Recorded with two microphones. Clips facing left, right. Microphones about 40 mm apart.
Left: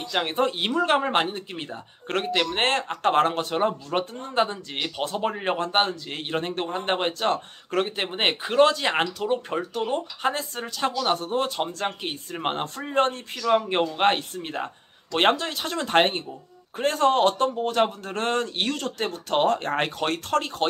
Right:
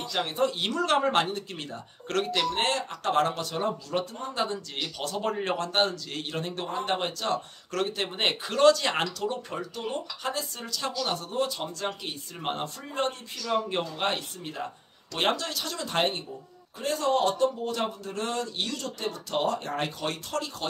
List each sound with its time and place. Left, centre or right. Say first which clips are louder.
0.1 s a man's voice: left 3 dB; left
2.6 s speech: left 5 dB; left
15.3 s speech: left 5 dB; left